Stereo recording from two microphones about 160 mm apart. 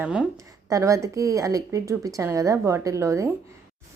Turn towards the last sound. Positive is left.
turn(degrees=-20)  # may be behind; listen again after turning